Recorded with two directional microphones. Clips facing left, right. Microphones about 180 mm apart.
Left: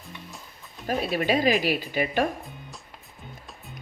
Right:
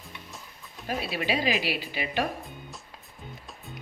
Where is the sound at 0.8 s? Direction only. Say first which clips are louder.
Left 5 dB; 45° left (ahead or behind).